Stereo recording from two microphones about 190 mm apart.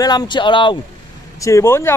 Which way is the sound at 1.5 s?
15° left (ahead or behind).